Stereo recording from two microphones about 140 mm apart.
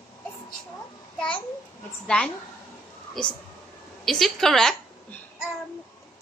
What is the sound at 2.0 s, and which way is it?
Speech, 5° left (ahead or behind).